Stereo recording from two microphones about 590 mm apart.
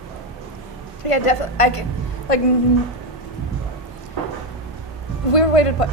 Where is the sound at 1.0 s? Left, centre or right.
Left.